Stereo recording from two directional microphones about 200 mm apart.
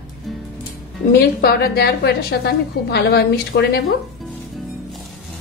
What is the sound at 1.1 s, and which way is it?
A woman's voice, 50° left (ahead or behind).